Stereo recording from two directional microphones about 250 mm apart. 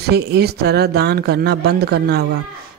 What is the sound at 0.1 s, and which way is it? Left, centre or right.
Speech, right.